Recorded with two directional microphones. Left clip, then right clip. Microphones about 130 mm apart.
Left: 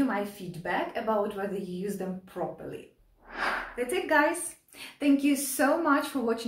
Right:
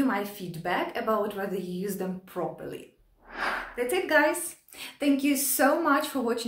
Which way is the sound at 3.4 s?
Centre (ahead or behind).